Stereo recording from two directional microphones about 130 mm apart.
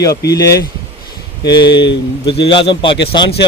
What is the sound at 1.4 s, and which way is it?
A man's voice, 35° left (ahead or behind).